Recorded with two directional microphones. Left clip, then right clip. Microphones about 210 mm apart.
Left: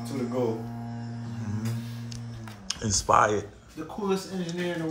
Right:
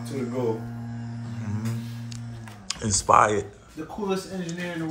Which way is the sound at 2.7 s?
15° left (ahead or behind).